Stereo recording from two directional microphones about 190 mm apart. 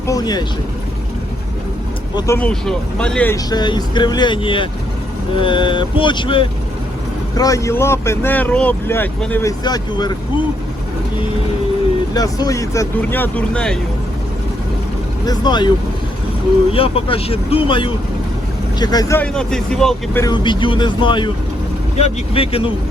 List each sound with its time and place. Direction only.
0.1 s speech: 20° left (ahead or behind)
2.1 s speech: 15° left (ahead or behind)
2.5 s speech: 5° left (ahead or behind)
3.3 s speech: 20° left (ahead or behind)
12.1 s speech: 20° left (ahead or behind)
15.3 s speech: 20° left (ahead or behind)
16.7 s speech: 30° left (ahead or behind); by 20.2 s centre (ahead or behind)
20.2 s speech: 25° left (ahead or behind)